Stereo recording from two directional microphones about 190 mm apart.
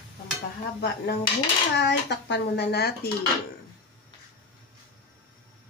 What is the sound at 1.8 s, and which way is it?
A child's voice, 65° left (ahead or behind).